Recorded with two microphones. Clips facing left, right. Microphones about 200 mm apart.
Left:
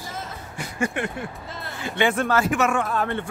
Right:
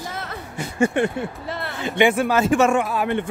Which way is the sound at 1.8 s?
20° right (ahead or behind).